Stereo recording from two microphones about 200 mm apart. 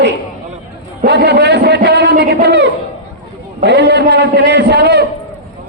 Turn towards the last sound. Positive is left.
turn(degrees=-55)  # may be behind; listen again after turning